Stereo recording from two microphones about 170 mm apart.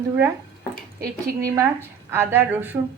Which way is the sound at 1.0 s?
20° right (ahead or behind).